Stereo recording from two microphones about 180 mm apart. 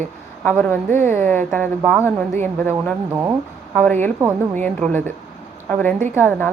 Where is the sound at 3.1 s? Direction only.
15° right (ahead or behind).